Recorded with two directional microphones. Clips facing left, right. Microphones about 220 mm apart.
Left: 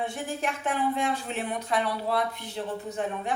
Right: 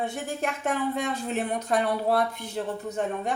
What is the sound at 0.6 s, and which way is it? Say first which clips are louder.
A woman's voice: even; 40° right (ahead or behind).